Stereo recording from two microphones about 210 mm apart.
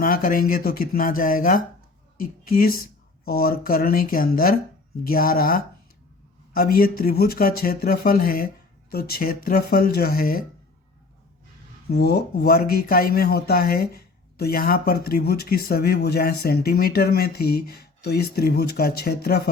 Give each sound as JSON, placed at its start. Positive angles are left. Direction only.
{"t": 0.0, "sound": "speech", "side_deg": 40}
{"t": 11.9, "sound": "speech", "side_deg": 50}